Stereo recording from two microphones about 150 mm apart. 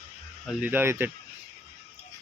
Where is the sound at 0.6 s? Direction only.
15° right (ahead or behind).